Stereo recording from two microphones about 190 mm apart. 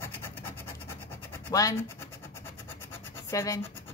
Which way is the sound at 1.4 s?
15° left (ahead or behind).